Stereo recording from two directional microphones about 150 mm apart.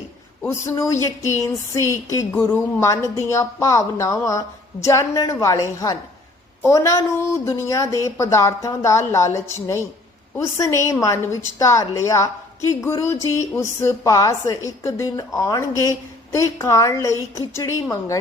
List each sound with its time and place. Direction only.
0.4 s speech: 20° left (ahead or behind)